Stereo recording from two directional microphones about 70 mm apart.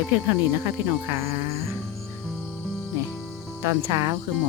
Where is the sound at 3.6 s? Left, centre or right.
Right.